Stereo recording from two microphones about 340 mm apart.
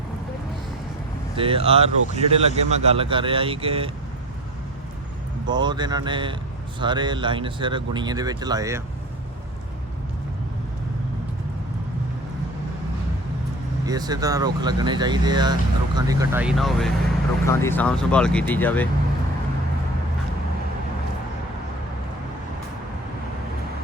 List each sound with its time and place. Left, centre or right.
1.4 s speech: centre
5.5 s speech: centre
13.8 s speech: centre